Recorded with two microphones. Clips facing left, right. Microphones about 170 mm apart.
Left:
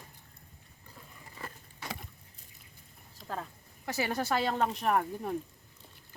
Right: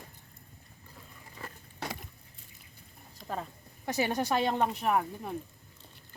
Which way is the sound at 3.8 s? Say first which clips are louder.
Right 2 dB; 20° right (ahead or behind).